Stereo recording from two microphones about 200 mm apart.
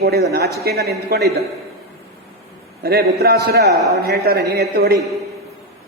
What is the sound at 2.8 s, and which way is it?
A man's voice, 50° right (ahead or behind).